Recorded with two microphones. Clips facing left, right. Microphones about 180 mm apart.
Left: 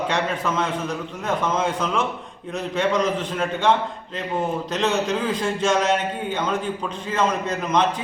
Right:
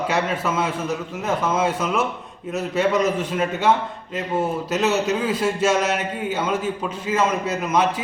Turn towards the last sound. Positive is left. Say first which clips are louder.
# right 1 dB
turn(degrees=-10)  # may be behind; listen again after turning